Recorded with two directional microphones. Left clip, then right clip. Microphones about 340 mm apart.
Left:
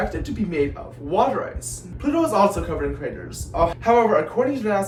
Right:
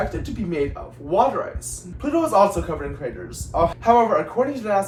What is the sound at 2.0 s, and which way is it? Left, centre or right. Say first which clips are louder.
A man's voice: right 1 dB; centre.